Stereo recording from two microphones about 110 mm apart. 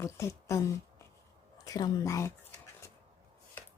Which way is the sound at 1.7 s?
35° left (ahead or behind).